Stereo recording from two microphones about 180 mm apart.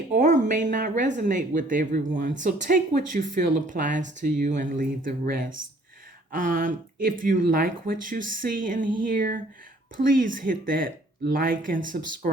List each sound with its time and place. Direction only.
0.1 s speech: 45° right (ahead or behind)